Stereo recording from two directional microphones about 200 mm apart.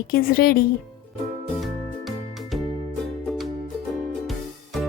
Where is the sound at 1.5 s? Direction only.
Centre (ahead or behind).